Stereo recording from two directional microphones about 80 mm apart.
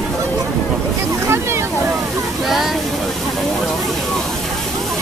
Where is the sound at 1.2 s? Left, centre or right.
Right.